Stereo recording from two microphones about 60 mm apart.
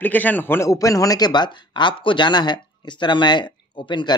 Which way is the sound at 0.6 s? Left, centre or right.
Left.